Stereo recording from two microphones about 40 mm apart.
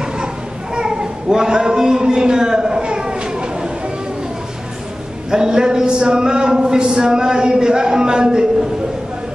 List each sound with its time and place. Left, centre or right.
0.7 s a child's voice: centre
5.3 s speech: centre